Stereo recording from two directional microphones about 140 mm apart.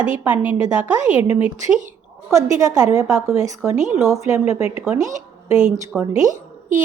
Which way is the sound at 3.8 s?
60° right (ahead or behind).